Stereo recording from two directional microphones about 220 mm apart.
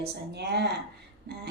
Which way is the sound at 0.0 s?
50° right (ahead or behind).